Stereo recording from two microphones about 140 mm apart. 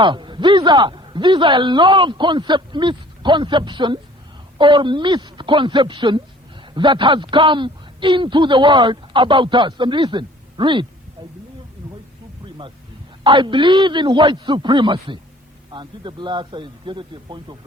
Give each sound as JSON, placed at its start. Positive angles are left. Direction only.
{"t": 0.0, "sound": "a man's voice", "side_deg": -35}
{"t": 13.2, "sound": "a man's voice", "side_deg": -35}